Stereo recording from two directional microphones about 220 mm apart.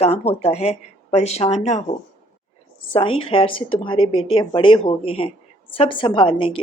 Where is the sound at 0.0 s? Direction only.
30° left (ahead or behind).